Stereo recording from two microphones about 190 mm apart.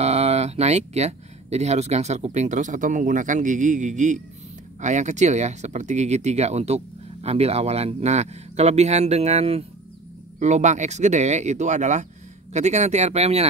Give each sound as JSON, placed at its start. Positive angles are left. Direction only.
{"t": 0.0, "sound": "speech", "side_deg": -35}